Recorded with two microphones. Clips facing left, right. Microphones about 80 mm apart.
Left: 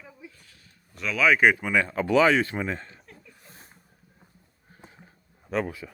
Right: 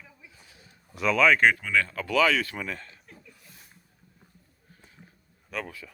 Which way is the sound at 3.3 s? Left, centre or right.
Left.